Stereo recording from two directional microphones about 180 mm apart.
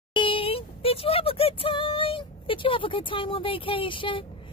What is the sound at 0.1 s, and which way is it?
A woman's voice, 30° left (ahead or behind).